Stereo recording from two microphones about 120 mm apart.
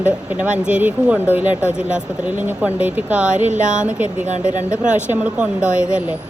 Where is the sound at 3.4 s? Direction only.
90° right.